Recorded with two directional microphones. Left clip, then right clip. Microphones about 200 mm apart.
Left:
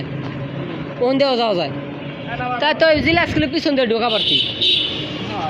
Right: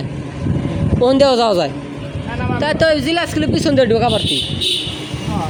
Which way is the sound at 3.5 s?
40° right (ahead or behind).